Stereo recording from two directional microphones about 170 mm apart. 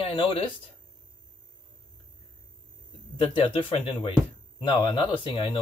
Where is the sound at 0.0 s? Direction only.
30° left (ahead or behind).